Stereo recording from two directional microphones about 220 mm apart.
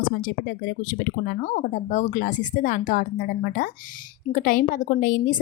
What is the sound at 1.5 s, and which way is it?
A woman's voice, 35° left (ahead or behind).